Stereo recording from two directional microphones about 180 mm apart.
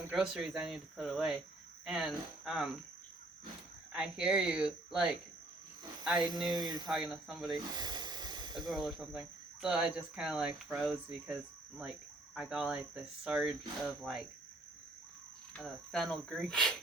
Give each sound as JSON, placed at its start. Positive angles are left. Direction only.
{"t": 0.1, "sound": "speech", "side_deg": -5}
{"t": 3.9, "sound": "speech", "side_deg": -5}
{"t": 6.5, "sound": "speech", "side_deg": -25}
{"t": 6.8, "sound": "speech", "side_deg": 0}
{"t": 7.5, "sound": "snake", "side_deg": -25}
{"t": 8.7, "sound": "speech", "side_deg": 0}
{"t": 15.5, "sound": "speech", "side_deg": 5}